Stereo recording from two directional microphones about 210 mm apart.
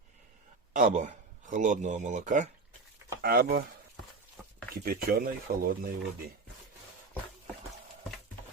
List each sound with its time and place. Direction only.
0.7 s speech: 35° right (ahead or behind)
3.2 s speech: 50° right (ahead or behind)
4.8 s speech: 45° right (ahead or behind)